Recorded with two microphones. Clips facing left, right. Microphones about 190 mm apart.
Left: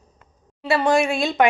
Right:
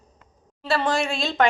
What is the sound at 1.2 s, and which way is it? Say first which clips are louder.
Speech: left 3 dB; 15° left (ahead or behind).